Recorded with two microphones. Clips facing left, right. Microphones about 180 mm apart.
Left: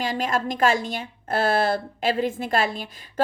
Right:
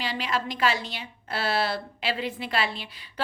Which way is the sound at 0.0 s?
45° left (ahead or behind).